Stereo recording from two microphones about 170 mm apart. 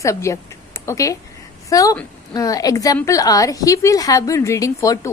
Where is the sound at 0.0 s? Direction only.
15° left (ahead or behind).